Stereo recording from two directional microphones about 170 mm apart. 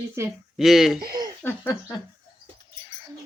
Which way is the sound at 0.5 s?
Centre (ahead or behind).